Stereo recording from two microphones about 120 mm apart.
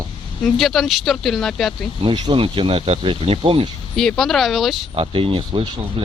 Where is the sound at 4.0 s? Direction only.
Centre (ahead or behind).